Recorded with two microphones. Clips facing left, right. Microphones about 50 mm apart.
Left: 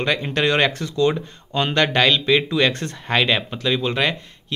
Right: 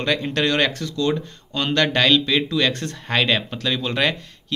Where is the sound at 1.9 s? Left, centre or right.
Centre.